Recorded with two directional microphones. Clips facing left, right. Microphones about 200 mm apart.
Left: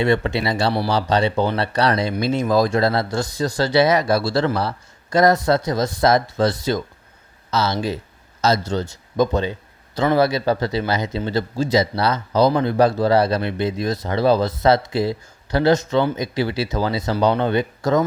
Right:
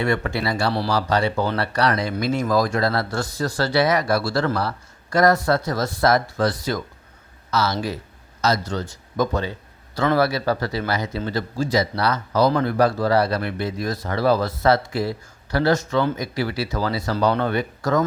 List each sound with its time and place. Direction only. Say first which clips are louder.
0.0 s a man's voice: left 4 dB; 20° left (ahead or behind)